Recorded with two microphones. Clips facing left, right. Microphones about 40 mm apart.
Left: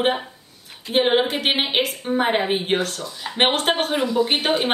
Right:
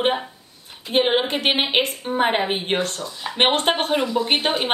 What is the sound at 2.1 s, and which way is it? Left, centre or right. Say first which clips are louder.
Speech: even; centre.